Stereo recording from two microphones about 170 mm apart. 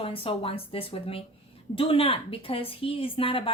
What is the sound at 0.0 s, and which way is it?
A woman's voice, 35° left (ahead or behind).